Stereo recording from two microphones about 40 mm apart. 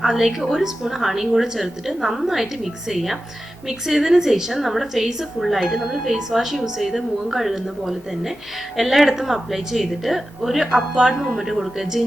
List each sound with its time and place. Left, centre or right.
0.0 s a woman's voice: centre
11.3 s a woman's voice: centre